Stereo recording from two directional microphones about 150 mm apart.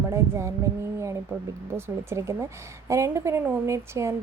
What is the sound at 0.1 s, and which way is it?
Speech, 20° right (ahead or behind).